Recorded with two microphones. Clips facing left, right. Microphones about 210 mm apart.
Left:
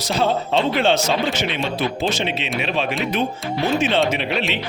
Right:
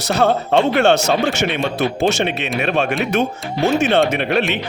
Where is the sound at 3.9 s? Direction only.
55° right (ahead or behind).